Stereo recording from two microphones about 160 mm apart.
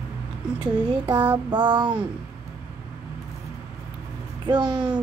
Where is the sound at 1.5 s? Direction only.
25° right (ahead or behind).